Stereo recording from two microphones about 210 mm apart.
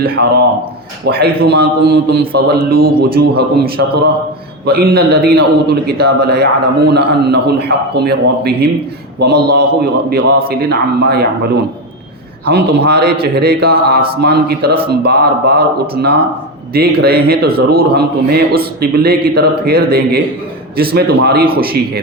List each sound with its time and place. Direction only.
1.0 s a man's voice: 50° right (ahead or behind)
12.5 s a man's voice: 50° right (ahead or behind)